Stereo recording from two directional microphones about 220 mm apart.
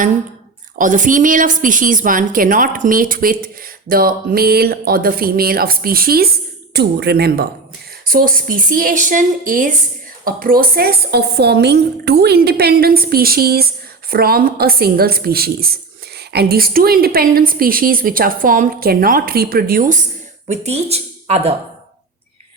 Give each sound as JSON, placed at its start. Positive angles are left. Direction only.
{"t": 0.8, "sound": "a woman's voice", "side_deg": -35}